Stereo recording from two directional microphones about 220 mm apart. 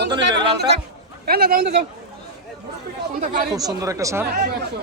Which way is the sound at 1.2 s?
45° right (ahead or behind).